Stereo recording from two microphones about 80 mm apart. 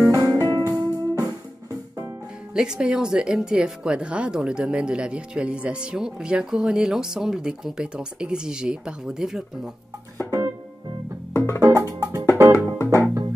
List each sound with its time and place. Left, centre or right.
0.0 s music: right
2.5 s speech: centre
11.3 s music: left
11.6 s music: right
12.5 s music: left